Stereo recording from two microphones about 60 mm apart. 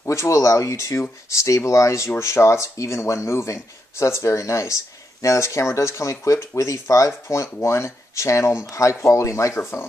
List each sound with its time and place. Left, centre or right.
0.0 s speech: left
9.6 s speech: left